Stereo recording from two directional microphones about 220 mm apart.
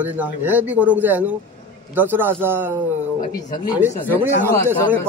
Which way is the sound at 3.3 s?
15° left (ahead or behind).